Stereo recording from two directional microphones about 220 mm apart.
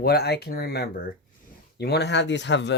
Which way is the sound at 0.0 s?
45° left (ahead or behind).